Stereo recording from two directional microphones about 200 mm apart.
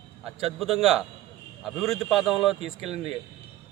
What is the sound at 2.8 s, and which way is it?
Speech, 30° right (ahead or behind).